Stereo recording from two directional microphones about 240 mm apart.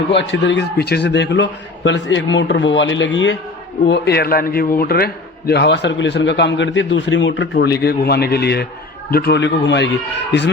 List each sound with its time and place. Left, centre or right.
0.1 s a man's voice: left